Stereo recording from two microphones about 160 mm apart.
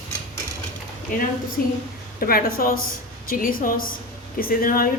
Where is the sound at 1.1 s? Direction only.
55° left (ahead or behind).